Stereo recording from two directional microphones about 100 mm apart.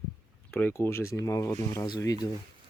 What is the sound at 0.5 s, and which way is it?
Speech, 25° left (ahead or behind).